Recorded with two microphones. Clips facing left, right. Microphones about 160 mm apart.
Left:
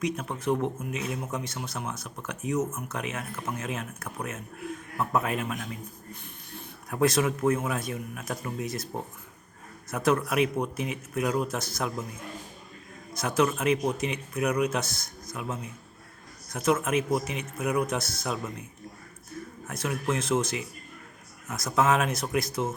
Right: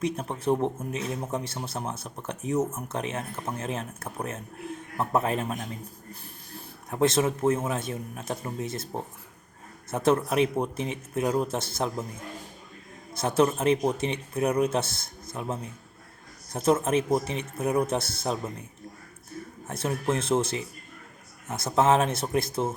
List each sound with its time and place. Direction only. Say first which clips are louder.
0.0 s speech: right 2 dB; 30° right (ahead or behind)
6.9 s speech: right 1 dB; 25° right (ahead or behind)
13.1 s speech: right 2 dB; 30° right (ahead or behind)
19.6 s speech: right 2 dB; 30° right (ahead or behind)